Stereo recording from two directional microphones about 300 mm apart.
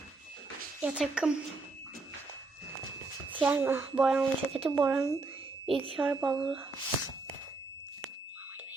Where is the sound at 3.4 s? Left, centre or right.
Centre.